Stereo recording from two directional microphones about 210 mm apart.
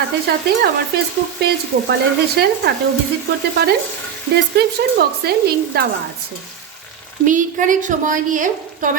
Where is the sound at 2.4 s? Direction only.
50° right (ahead or behind).